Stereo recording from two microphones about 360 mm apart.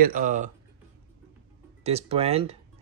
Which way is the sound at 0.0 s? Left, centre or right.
Right.